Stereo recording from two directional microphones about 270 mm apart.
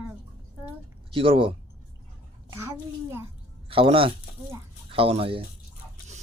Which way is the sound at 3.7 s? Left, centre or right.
Centre.